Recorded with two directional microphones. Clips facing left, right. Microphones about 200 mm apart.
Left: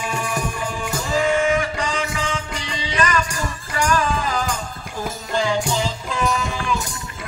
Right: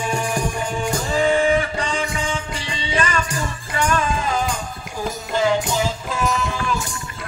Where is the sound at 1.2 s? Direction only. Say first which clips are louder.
Right 2 dB; 35° right (ahead or behind).